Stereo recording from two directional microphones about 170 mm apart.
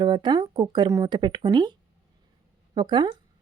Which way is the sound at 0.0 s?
25° right (ahead or behind).